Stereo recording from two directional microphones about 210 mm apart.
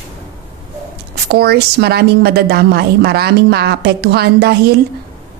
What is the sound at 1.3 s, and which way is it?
A woman's voice, 50° right (ahead or behind).